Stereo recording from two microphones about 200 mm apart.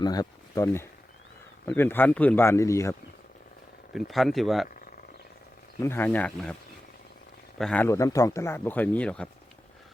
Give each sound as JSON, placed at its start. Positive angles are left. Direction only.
{"t": 0.0, "sound": "speech", "side_deg": 20}
{"t": 3.9, "sound": "speech", "side_deg": 0}
{"t": 5.8, "sound": "speech", "side_deg": 10}
{"t": 7.6, "sound": "speech", "side_deg": 5}